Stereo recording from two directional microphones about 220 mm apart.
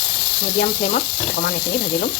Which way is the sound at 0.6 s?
40° left (ahead or behind).